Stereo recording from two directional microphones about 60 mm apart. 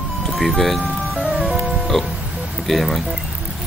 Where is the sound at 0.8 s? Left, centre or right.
Centre.